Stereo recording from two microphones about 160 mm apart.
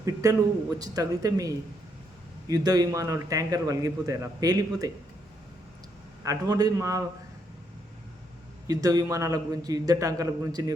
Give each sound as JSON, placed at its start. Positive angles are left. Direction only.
{"t": 0.0, "sound": "a man's voice", "side_deg": -20}
{"t": 6.2, "sound": "a man's voice", "side_deg": -25}
{"t": 8.6, "sound": "a man's voice", "side_deg": -20}